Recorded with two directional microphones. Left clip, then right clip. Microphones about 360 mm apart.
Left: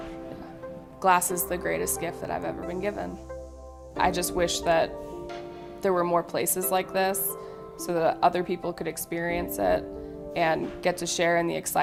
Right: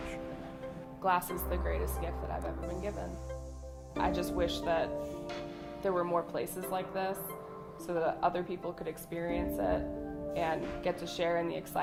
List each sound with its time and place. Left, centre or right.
1.0 s speech: left
3.9 s speech: left